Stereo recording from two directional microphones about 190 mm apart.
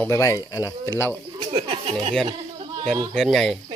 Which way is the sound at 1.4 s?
30° right (ahead or behind).